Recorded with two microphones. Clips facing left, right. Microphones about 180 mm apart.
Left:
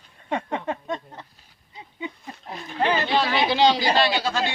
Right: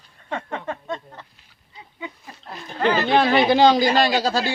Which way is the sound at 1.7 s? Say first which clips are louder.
Left 2 dB; 20° left (ahead or behind).